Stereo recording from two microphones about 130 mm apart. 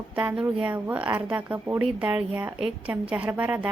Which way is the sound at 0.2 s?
10° right (ahead or behind).